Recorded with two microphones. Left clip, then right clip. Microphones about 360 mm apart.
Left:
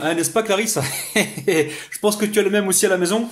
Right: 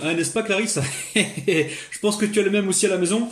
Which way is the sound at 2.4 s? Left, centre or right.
Left.